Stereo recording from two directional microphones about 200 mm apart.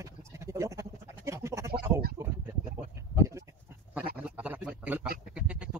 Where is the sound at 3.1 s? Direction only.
15° right (ahead or behind).